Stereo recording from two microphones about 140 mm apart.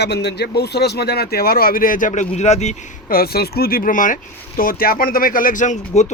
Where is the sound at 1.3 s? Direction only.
90° left; by 2.7 s 55° left (ahead or behind).